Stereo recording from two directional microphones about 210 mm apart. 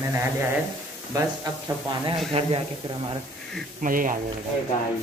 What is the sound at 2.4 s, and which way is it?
Speech, 30° right (ahead or behind).